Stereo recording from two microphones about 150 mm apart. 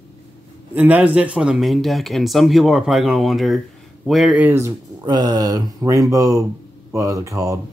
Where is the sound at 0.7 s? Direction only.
10° right (ahead or behind).